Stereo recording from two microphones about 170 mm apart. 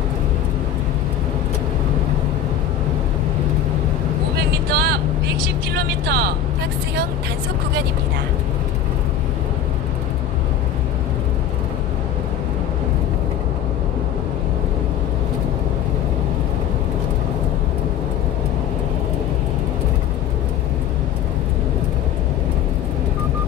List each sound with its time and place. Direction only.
4.6 s vehicle: 65° right (ahead or behind)
5.8 s speech: 65° right (ahead or behind)